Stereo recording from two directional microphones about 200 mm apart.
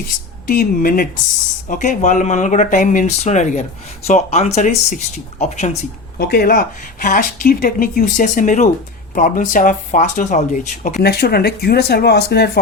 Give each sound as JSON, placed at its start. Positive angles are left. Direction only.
{"t": 0.4, "sound": "speech", "side_deg": 45}
{"t": 6.1, "sound": "speech", "side_deg": 50}
{"t": 11.0, "sound": "speech", "side_deg": 55}